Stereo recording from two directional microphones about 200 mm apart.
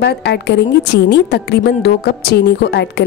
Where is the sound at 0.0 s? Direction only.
55° left (ahead or behind).